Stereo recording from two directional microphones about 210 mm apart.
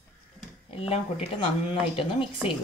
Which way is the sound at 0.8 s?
25° left (ahead or behind).